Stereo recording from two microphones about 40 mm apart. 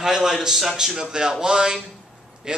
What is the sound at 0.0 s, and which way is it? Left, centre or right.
A man's voice, centre.